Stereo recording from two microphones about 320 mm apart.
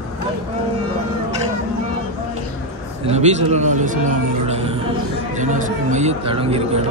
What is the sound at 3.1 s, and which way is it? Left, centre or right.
A man's voice, centre.